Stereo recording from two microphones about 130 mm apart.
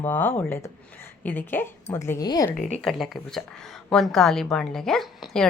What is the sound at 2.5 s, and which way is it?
Speech, 75° left (ahead or behind).